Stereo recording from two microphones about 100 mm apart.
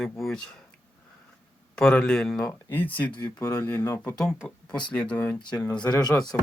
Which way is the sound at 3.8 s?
30° left (ahead or behind).